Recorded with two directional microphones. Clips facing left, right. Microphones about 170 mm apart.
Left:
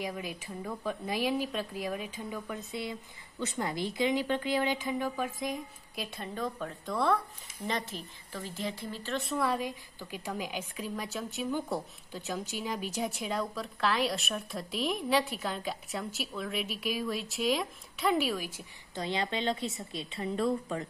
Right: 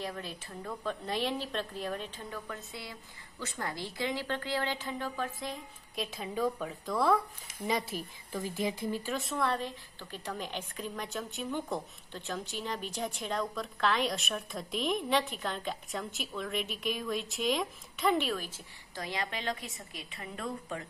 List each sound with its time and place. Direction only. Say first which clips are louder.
0.0 s a woman's voice: left 2 dB; 10° left (ahead or behind)
5.9 s speech: right 3 dB; centre (ahead or behind)
9.2 s a woman's voice: left 1 dB; 5° left (ahead or behind)
18.9 s a woman's voice: left 4 dB; 25° left (ahead or behind)